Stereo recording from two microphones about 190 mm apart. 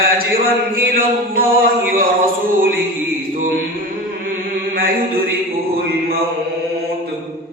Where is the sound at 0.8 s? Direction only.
50° right (ahead or behind).